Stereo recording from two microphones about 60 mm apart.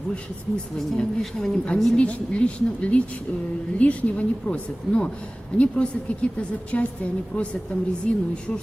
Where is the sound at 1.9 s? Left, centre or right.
Centre.